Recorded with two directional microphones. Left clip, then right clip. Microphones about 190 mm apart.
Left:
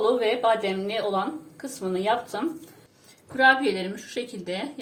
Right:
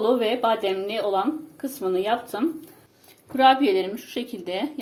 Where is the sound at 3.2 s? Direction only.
35° right (ahead or behind).